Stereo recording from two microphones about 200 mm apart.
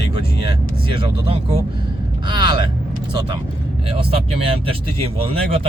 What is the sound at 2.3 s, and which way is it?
Vehicle, 20° right (ahead or behind).